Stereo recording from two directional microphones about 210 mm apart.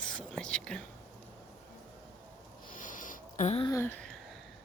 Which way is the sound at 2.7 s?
40° left (ahead or behind).